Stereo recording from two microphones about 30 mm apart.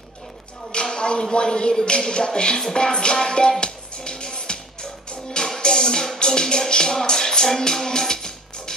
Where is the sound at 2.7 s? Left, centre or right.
Left.